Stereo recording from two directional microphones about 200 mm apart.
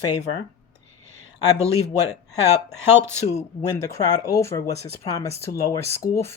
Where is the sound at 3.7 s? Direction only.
15° left (ahead or behind).